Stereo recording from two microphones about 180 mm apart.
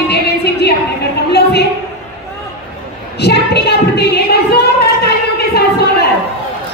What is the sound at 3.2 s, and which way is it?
A woman's voice, 65° left (ahead or behind).